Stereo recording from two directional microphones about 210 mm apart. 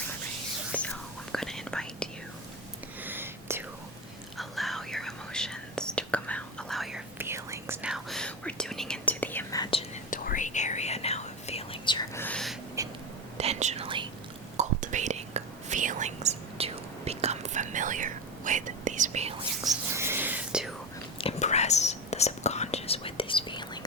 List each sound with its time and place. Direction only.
0.7 s whispering: 5° left (ahead or behind)
3.0 s whispering: 10° right (ahead or behind); by 10.0 s 25° left (ahead or behind)
10.1 s whispering: 40° left (ahead or behind); by 12.5 s 5° left (ahead or behind)
12.8 s a sound: 15° right (ahead or behind)
13.3 s whispering: 30° right (ahead or behind)
14.5 s whispering: 35° right (ahead or behind)
19.6 s whispering: 10° right (ahead or behind)
21.2 s whispering: 30° left (ahead or behind)